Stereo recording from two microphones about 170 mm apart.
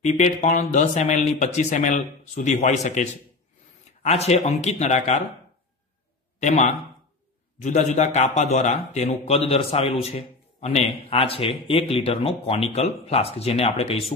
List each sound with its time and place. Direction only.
0.0 s a man's voice: 45° left (ahead or behind)
6.4 s a man's voice: 40° left (ahead or behind)